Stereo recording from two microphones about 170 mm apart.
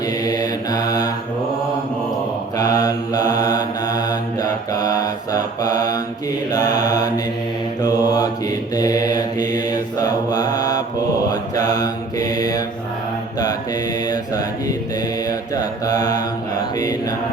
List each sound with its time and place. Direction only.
0.3 s mantra: 20° left (ahead or behind)
2.6 s mantra: 20° left (ahead or behind)
14.1 s mantra: 20° left (ahead or behind)